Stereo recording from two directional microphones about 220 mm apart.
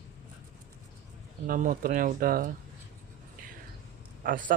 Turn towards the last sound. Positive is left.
turn(degrees=-40)  # may be behind; listen again after turning